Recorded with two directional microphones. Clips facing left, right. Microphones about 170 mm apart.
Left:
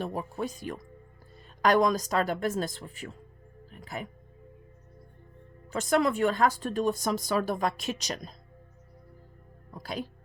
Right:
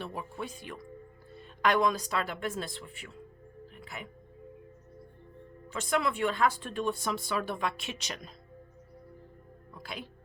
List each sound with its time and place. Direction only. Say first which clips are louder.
0.0 s speech: left 6 dB; 40° left (ahead or behind)
5.6 s speech: left 5 dB; 40° left (ahead or behind)
9.7 s speech: left 7 dB; 40° left (ahead or behind)